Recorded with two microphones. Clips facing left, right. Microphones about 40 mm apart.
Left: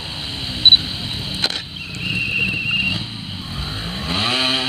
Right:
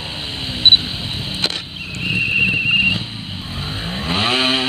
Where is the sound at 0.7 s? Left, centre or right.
Centre.